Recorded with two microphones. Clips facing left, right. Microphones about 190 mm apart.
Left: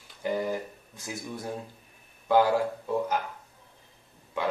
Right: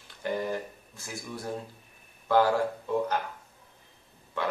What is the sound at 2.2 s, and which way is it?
Speech, 15° left (ahead or behind).